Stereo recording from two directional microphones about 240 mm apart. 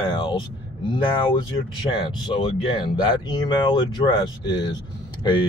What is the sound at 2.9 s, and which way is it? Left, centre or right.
Speech, centre.